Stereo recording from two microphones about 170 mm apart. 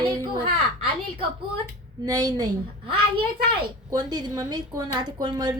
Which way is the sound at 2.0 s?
20° right (ahead or behind).